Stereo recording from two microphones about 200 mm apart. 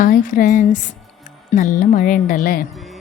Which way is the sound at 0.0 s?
45° left (ahead or behind).